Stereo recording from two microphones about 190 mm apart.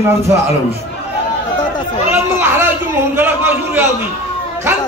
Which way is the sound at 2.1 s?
10° right (ahead or behind).